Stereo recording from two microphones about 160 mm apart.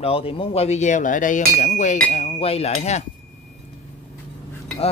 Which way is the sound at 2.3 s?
40° left (ahead or behind).